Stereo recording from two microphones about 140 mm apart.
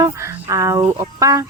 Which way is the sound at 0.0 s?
20° right (ahead or behind).